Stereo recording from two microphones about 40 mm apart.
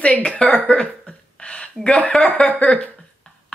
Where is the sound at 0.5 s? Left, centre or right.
Left.